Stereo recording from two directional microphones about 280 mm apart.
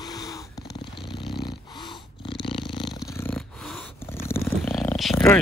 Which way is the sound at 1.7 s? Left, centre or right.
Centre.